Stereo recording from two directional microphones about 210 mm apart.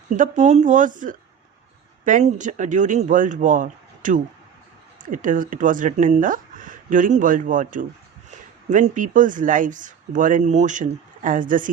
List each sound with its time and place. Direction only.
0.2 s speech: 35° right (ahead or behind)